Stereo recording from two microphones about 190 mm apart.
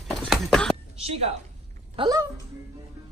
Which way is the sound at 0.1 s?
5° left (ahead or behind).